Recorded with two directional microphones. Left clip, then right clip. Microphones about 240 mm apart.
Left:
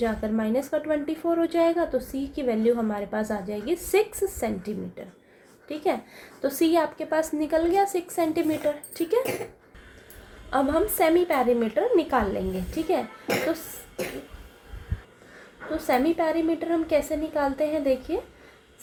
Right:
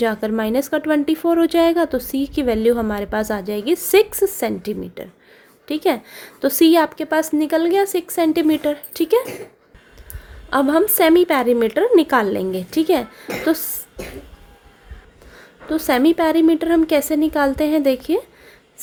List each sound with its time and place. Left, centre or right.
0.0 s a woman's voice: right
10.5 s a woman's voice: right
13.3 s speech: left
15.7 s a woman's voice: right